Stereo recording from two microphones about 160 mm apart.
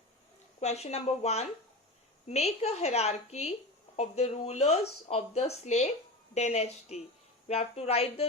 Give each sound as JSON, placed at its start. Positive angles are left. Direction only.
{"t": 0.6, "sound": "a woman's voice", "side_deg": 45}